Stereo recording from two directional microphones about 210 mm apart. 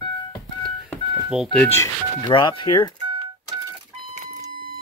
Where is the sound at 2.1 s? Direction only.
20° left (ahead or behind).